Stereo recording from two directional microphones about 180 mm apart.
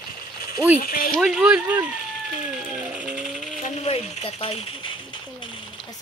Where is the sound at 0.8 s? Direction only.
55° left (ahead or behind).